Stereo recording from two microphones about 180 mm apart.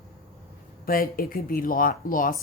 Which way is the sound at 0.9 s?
55° left (ahead or behind).